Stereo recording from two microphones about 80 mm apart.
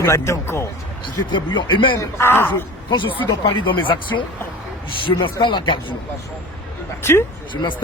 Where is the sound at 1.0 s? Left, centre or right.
Left.